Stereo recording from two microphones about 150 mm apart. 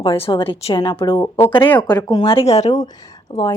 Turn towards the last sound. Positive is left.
turn(degrees=30)  # may be behind; listen again after turning